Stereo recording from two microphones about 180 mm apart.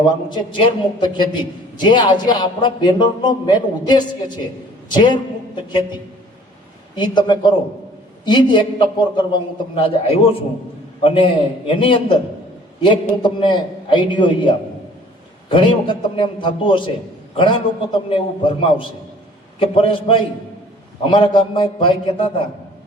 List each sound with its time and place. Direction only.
0.0 s a man's voice: 25° left (ahead or behind)
6.9 s a man's voice: 25° left (ahead or behind)